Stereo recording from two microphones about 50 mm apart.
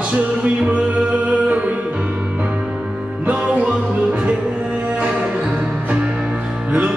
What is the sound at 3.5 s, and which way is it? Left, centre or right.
Music, right.